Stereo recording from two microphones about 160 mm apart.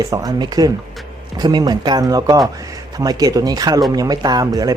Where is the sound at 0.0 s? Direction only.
20° right (ahead or behind).